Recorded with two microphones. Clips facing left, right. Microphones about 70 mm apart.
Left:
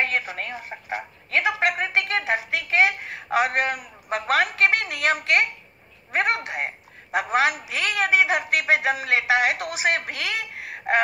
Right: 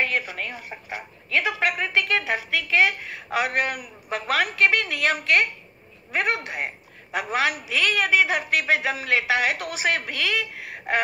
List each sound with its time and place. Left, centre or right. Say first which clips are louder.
0.0 s a woman's voice: even; left